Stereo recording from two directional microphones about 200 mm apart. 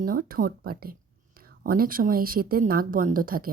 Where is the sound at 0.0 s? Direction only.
45° right (ahead or behind).